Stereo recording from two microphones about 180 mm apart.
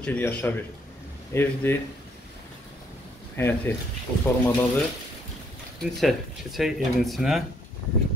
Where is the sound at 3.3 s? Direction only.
10° left (ahead or behind).